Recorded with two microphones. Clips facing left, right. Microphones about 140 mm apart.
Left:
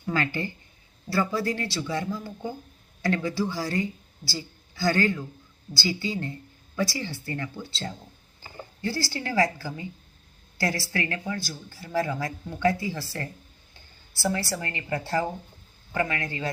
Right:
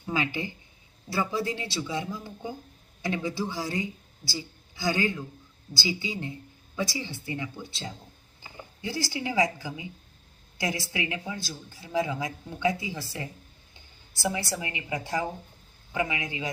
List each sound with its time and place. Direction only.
0.0 s a man's voice: 15° right (ahead or behind)